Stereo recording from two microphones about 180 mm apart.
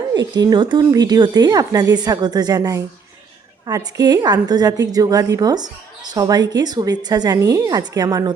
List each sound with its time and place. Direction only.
0.1 s a woman's voice: 25° right (ahead or behind)